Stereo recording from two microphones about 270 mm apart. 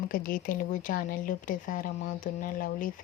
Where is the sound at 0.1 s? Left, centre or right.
Left.